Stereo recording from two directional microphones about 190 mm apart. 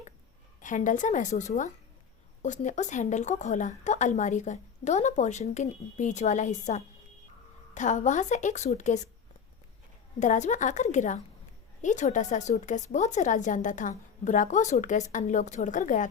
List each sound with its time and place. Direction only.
0.6 s speech: 40° left (ahead or behind)
10.2 s speech: 40° left (ahead or behind)